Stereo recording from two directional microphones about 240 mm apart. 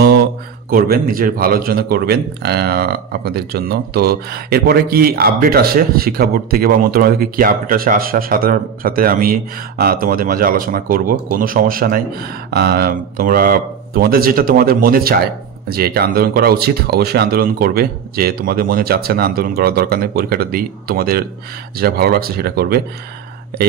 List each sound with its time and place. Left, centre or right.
0.0 s speech: right